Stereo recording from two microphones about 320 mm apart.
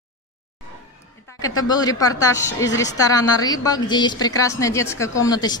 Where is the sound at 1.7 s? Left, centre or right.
Centre.